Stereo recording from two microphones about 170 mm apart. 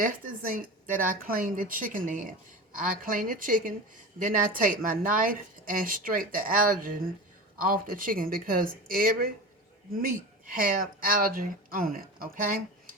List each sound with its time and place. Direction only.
0.0 s speech: 55° right (ahead or behind)